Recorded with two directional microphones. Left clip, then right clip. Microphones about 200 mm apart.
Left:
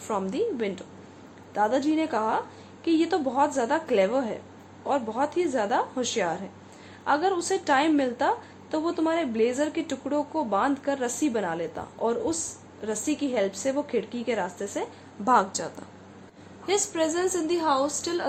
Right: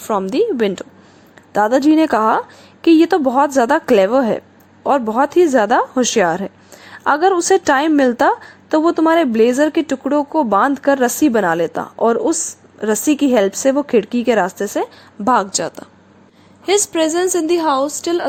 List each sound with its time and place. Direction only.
0.1 s a woman's voice: 45° right (ahead or behind)